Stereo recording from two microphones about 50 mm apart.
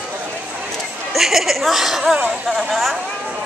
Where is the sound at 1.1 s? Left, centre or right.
Centre.